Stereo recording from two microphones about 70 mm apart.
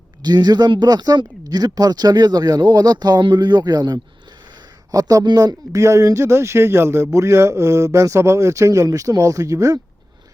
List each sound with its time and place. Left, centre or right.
0.2 s speech: right
4.9 s speech: right
5.7 s a man's voice: right